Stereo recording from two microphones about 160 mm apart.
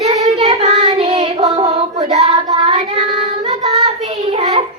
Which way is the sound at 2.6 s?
40° right (ahead or behind).